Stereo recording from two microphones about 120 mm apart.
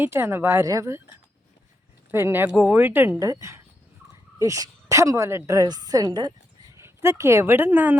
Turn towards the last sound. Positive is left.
turn(degrees=-15)  # may be behind; listen again after turning